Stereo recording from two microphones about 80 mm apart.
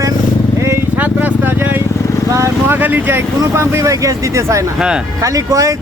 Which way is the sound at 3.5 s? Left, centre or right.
Right.